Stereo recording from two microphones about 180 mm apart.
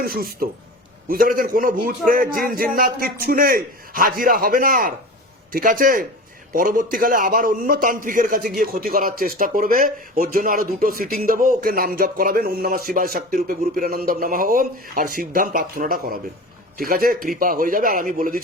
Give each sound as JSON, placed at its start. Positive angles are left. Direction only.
{"t": 0.0, "sound": "a man's voice", "side_deg": -55}